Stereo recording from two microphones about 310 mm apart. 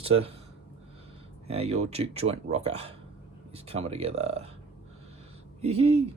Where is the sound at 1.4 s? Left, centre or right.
Centre.